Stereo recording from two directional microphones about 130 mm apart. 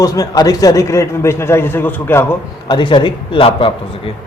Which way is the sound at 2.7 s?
35° left (ahead or behind).